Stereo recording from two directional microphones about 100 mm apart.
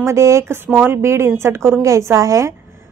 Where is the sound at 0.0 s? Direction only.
30° right (ahead or behind).